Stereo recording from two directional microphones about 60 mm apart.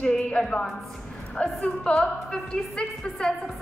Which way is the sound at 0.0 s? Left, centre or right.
Centre.